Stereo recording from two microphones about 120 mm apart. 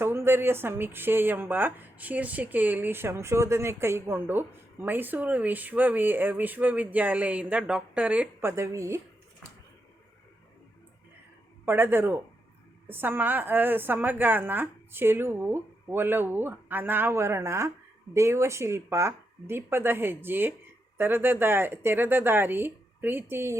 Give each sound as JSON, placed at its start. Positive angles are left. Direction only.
{"t": 0.0, "sound": "a woman's voice", "side_deg": -20}
{"t": 11.6, "sound": "a woman's voice", "side_deg": -15}